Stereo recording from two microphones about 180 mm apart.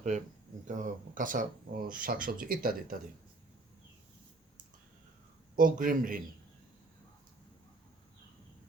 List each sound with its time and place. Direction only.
0.7 s speech: 45° right (ahead or behind)
5.5 s speech: 50° right (ahead or behind)